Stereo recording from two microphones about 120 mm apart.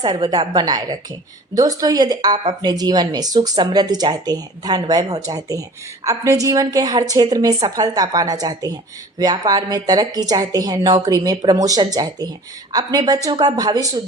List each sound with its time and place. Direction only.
0.0 s a woman's voice: 35° right (ahead or behind)